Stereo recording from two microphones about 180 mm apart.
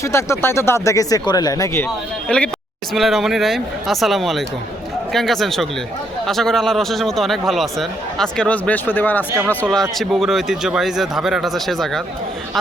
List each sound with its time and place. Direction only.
0.0 s speech: 15° left (ahead or behind)
2.2 s speech: 5° left (ahead or behind)